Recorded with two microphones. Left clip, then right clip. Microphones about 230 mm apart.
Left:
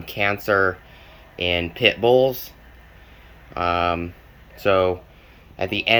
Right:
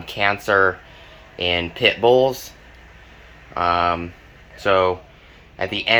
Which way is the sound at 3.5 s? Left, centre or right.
Centre.